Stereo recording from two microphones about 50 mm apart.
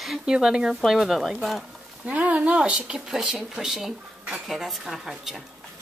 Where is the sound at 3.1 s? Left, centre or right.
Centre.